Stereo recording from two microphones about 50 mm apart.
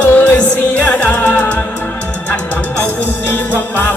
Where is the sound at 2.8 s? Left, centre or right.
Left.